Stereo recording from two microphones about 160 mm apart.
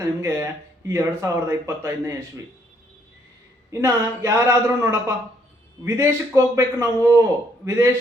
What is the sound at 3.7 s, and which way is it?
A man's voice, 20° right (ahead or behind).